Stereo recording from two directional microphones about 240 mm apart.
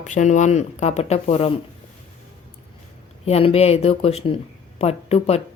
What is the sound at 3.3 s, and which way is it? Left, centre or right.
Speech, left.